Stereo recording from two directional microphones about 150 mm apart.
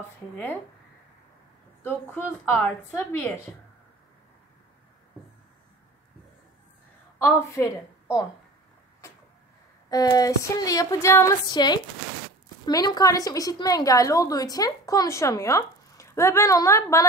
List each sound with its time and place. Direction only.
1.8 s speech: 15° left (ahead or behind)
7.2 s a woman's voice: 20° left (ahead or behind)
9.8 s a woman's voice: 25° left (ahead or behind)